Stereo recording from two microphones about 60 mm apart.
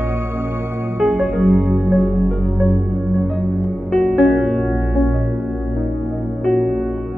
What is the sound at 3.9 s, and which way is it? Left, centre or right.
Music, centre.